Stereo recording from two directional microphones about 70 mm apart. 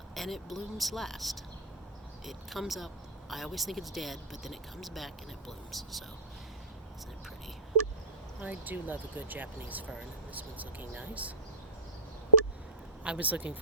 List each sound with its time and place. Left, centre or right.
0.1 s speech: centre
8.4 s speech: right
13.1 s speech: centre